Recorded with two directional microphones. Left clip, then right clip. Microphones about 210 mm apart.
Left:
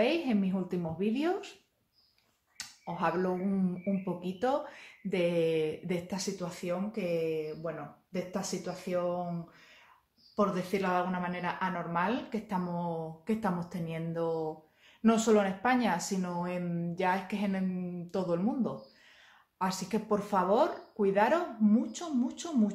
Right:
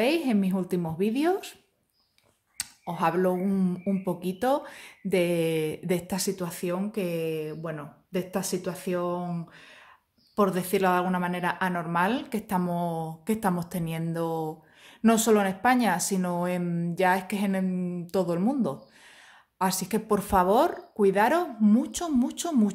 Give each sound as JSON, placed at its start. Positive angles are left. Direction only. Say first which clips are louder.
{"t": 0.0, "sound": "a woman's voice", "louder": "right 4 dB", "side_deg": -40}
{"t": 2.5, "sound": "speech", "louder": "right 5 dB", "side_deg": -40}
{"t": 10.3, "sound": "speech", "louder": "right 5 dB", "side_deg": -50}